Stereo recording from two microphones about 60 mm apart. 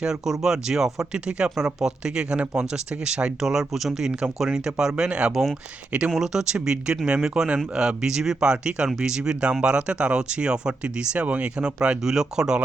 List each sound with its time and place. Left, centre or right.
0.0 s speech: centre